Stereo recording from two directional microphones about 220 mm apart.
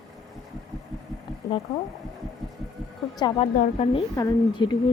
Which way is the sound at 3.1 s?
20° left (ahead or behind).